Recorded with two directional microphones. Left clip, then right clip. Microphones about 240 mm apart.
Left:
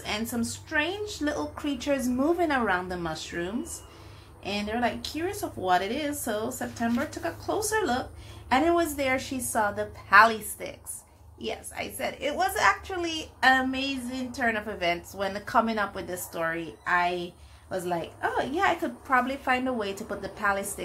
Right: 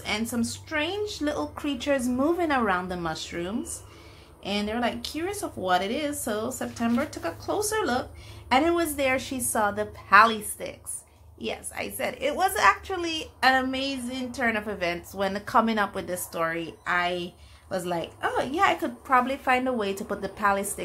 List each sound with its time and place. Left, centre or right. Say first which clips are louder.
0.0 s a woman's voice: right 2 dB; centre